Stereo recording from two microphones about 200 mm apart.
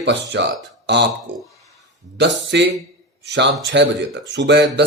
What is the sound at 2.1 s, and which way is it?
Speech, 60° right (ahead or behind).